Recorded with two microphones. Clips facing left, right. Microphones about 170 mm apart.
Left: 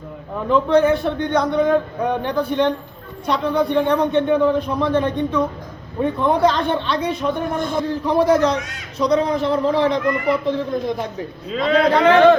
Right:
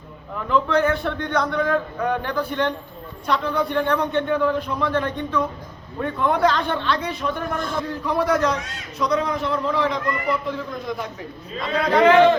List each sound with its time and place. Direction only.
0.3 s a man's voice: 20° left (ahead or behind)
11.5 s a man's voice: 70° left (ahead or behind)